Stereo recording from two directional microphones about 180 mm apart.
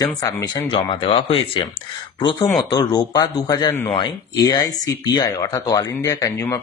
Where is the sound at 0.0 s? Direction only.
25° left (ahead or behind).